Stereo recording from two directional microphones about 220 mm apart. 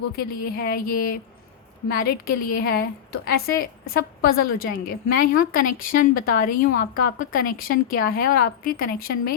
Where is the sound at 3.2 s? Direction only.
45° left (ahead or behind).